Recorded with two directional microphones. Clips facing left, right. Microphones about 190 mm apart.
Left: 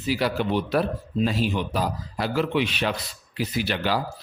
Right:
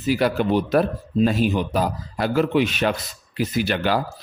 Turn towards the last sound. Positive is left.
turn(degrees=-50)  # may be behind; listen again after turning